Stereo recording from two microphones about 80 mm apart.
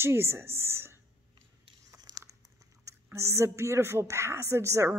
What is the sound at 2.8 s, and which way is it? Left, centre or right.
A woman's voice, right.